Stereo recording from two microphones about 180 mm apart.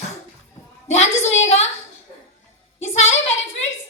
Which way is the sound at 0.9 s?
35° left (ahead or behind).